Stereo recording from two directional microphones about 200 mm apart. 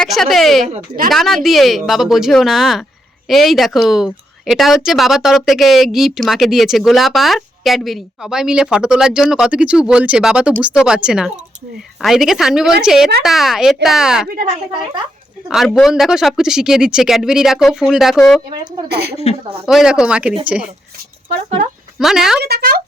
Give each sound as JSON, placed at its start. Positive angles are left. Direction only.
{"t": 0.0, "sound": "a woman's voice", "side_deg": 0}
{"t": 0.7, "sound": "speech", "side_deg": -45}
{"t": 1.1, "sound": "a woman's voice", "side_deg": 0}
{"t": 14.3, "sound": "speech", "side_deg": -45}
{"t": 15.4, "sound": "a woman's voice", "side_deg": 0}
{"t": 18.9, "sound": "speech", "side_deg": -55}
{"t": 19.6, "sound": "a woman's voice", "side_deg": -5}
{"t": 21.9, "sound": "a woman's voice", "side_deg": 0}
{"t": 22.4, "sound": "speech", "side_deg": -50}